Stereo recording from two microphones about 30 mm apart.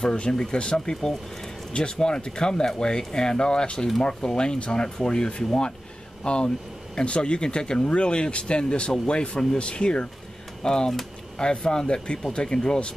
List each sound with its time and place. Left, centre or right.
0.0 s speech: left
5.0 s speech: left